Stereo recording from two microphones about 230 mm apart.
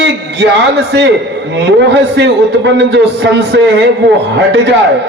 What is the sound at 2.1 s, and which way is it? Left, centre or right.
Speech, right.